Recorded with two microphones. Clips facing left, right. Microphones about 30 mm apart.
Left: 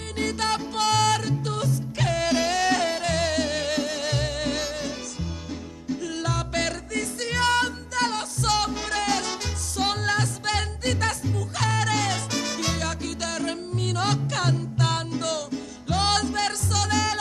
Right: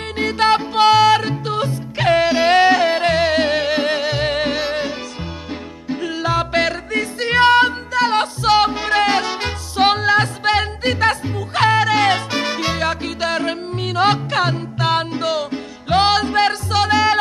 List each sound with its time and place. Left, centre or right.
0.2 s music: right